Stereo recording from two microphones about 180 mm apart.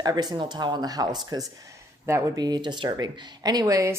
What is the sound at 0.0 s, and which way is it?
Speech, 20° right (ahead or behind).